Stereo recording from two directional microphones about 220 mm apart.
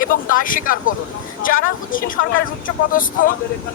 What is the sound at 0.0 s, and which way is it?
A man's voice, 40° left (ahead or behind).